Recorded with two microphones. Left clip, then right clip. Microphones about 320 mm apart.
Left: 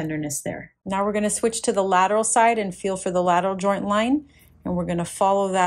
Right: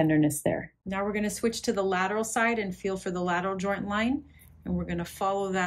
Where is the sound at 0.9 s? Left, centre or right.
Left.